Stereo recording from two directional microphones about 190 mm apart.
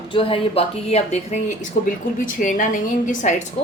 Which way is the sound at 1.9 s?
45° left (ahead or behind).